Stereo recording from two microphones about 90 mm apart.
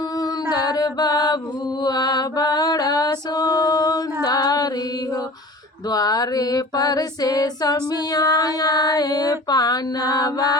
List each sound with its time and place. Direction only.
0.5 s music: 45° left (ahead or behind)
1.8 s mantra: 45° left (ahead or behind)
5.9 s female singing: 45° left (ahead or behind)